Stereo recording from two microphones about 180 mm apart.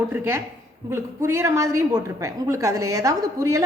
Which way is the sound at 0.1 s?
15° right (ahead or behind).